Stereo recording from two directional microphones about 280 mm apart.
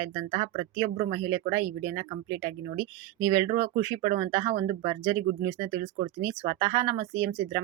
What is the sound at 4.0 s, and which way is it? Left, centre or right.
Speech, centre.